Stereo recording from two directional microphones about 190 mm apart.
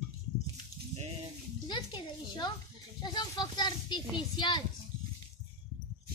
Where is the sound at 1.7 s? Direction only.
20° left (ahead or behind).